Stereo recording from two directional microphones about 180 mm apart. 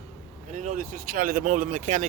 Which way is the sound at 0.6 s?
45° right (ahead or behind).